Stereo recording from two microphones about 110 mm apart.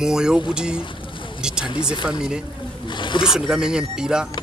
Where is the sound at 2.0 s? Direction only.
5° right (ahead or behind).